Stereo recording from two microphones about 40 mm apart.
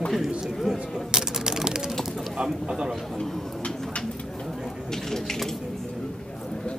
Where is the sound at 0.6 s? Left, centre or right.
Centre.